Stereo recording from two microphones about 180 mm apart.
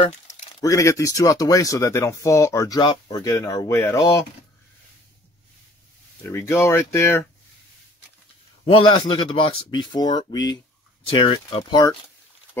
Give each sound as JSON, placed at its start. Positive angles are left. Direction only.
{"t": 0.3, "sound": "speech", "side_deg": 15}
{"t": 6.2, "sound": "speech", "side_deg": 15}
{"t": 8.6, "sound": "speech", "side_deg": 30}